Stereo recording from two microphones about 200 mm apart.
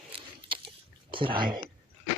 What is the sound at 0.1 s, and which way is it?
Biting, 25° right (ahead or behind).